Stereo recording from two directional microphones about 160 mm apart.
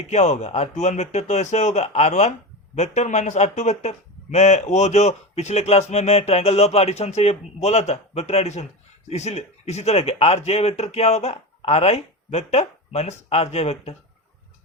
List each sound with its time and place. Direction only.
0.1 s speech: 45° left (ahead or behind)